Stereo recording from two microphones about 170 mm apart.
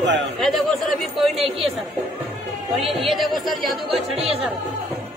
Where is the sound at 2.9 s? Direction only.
Centre (ahead or behind).